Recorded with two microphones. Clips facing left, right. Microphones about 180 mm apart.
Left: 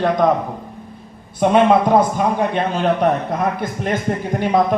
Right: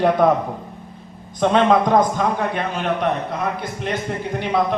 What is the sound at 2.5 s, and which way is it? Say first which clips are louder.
A man's voice: left 5 dB; 35° left (ahead or behind).